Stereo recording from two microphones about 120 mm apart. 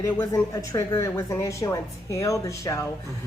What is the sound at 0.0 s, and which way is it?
Speech, 25° left (ahead or behind).